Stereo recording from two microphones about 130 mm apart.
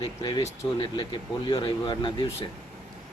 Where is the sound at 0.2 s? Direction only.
35° left (ahead or behind).